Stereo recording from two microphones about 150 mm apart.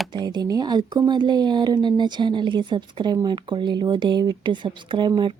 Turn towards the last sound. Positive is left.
turn(degrees=-30)  # may be behind; listen again after turning